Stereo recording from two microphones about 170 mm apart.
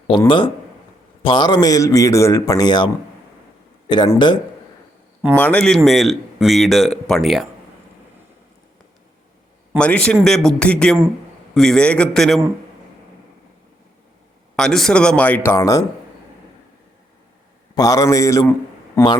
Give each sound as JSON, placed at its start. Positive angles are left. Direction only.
{"t": 0.3, "sound": "a man's voice", "side_deg": 30}
{"t": 5.4, "sound": "speech", "side_deg": 5}
{"t": 9.7, "sound": "speech", "side_deg": 5}
{"t": 14.5, "sound": "speech", "side_deg": 5}
{"t": 17.7, "sound": "a man's voice", "side_deg": 20}